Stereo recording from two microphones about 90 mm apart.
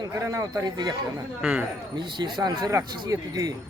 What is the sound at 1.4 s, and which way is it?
Speech, 10° right (ahead or behind).